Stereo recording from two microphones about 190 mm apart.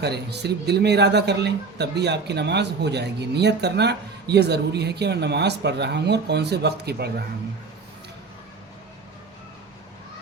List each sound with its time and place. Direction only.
0.0 s speech: 60° right (ahead or behind)